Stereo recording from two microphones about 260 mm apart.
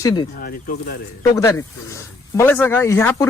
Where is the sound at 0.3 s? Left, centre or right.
Left.